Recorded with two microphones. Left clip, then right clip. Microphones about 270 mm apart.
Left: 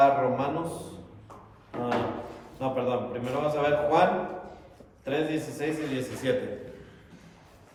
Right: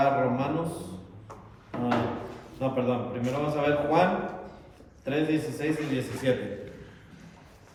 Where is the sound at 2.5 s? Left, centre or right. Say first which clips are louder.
Even; centre.